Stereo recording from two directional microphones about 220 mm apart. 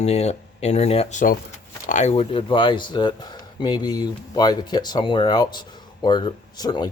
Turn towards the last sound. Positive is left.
turn(degrees=20)  # may be behind; listen again after turning